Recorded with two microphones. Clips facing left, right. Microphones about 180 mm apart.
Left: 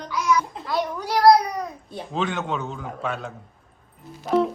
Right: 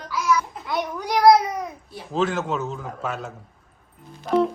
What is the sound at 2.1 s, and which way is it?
A woman's voice, centre (ahead or behind).